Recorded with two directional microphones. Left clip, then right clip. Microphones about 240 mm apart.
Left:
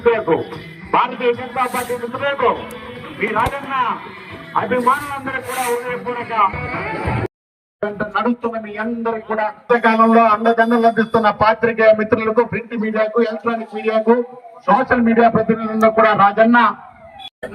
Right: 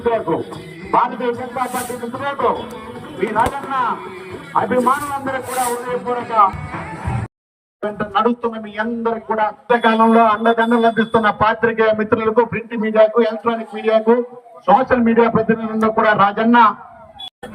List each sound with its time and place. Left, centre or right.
0.0 s a man's voice: centre
6.9 s music: left
7.9 s a man's voice: centre